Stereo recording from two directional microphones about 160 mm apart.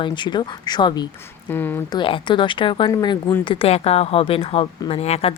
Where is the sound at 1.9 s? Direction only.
30° left (ahead or behind).